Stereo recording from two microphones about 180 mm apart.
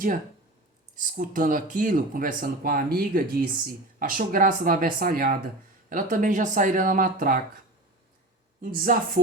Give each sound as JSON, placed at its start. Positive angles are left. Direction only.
{"t": 0.9, "sound": "speech", "side_deg": -50}
{"t": 8.6, "sound": "speech", "side_deg": -50}